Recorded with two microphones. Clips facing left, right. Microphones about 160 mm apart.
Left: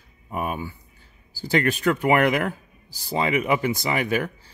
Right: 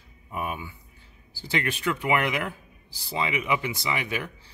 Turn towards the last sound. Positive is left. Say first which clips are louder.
# left 6 dB
turn(degrees=45)  # may be behind; listen again after turning